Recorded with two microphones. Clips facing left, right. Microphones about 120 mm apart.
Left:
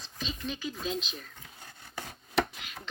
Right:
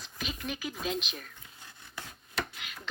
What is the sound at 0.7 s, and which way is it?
Speech, 65° right (ahead or behind).